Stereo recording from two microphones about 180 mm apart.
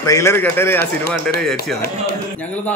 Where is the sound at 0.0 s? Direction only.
15° left (ahead or behind).